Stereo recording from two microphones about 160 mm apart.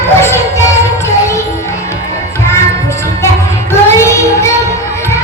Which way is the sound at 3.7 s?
15° left (ahead or behind).